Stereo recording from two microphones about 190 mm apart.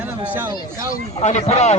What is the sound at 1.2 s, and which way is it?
Speech, 35° left (ahead or behind).